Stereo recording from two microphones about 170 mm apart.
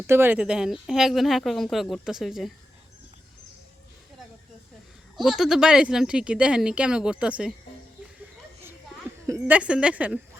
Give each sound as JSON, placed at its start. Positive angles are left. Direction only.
{"t": 0.1, "sound": "speech", "side_deg": -10}
{"t": 5.1, "sound": "speech", "side_deg": 0}
{"t": 9.2, "sound": "a woman's voice", "side_deg": -15}
{"t": 9.6, "sound": "a woman's voice", "side_deg": -5}